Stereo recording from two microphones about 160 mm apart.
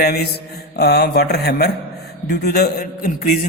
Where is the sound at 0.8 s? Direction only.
90° left.